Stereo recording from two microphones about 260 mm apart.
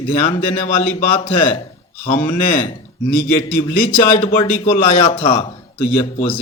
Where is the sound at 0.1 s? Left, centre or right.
Left.